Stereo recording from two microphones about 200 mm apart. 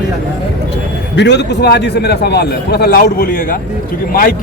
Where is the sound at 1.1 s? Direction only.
60° left (ahead or behind).